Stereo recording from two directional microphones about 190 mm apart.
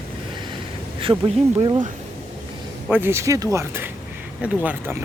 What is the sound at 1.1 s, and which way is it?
Speech, 10° right (ahead or behind).